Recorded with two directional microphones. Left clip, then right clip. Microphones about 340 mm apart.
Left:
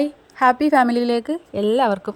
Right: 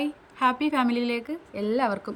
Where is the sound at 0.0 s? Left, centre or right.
Centre.